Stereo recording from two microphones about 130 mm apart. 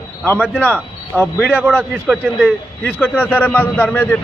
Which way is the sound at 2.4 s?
10° left (ahead or behind).